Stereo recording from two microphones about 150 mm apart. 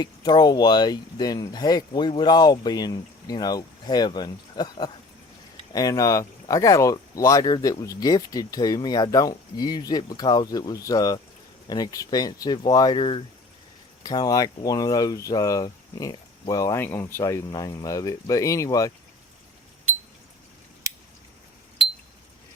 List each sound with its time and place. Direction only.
0.0 s speech: 30° left (ahead or behind)
20.9 s scissors: 20° right (ahead or behind)